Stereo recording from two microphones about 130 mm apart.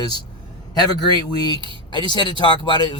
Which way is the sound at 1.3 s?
35° left (ahead or behind).